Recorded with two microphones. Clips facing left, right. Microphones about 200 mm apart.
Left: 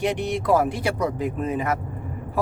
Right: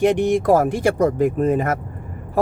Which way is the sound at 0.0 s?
50° right (ahead or behind).